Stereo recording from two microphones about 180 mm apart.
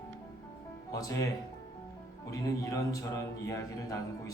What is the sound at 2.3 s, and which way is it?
A man's voice, 20° left (ahead or behind).